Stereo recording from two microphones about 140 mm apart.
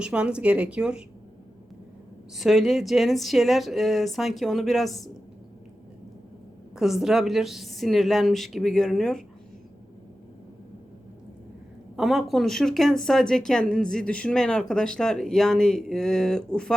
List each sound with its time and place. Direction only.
0.0 s speech: 5° right (ahead or behind)
2.3 s speech: centre (ahead or behind)
6.7 s speech: 5° right (ahead or behind)
11.9 s speech: centre (ahead or behind)